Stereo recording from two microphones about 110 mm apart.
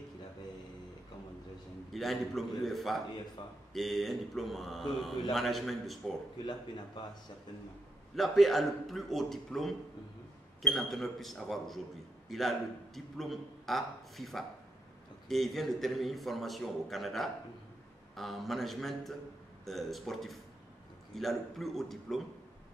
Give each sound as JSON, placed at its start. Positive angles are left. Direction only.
{"t": 1.9, "sound": "a man's voice", "side_deg": 0}
{"t": 6.4, "sound": "speech", "side_deg": 40}
{"t": 8.2, "sound": "a man's voice", "side_deg": 0}